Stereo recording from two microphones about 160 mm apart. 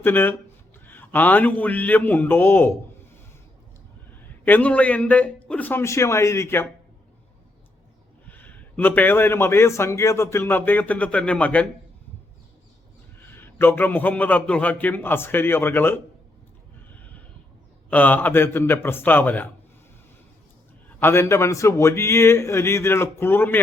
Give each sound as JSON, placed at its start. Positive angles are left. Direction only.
{"t": 0.0, "sound": "a man's voice", "side_deg": 15}
{"t": 4.2, "sound": "a man's voice", "side_deg": 10}
{"t": 8.3, "sound": "a man's voice", "side_deg": 10}
{"t": 13.1, "sound": "a man's voice", "side_deg": 15}
{"t": 16.9, "sound": "horse", "side_deg": 10}
{"t": 17.8, "sound": "a man's voice", "side_deg": 10}
{"t": 21.0, "sound": "a man's voice", "side_deg": 15}